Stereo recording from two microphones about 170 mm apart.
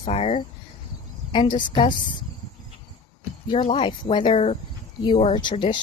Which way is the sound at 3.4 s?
30° left (ahead or behind).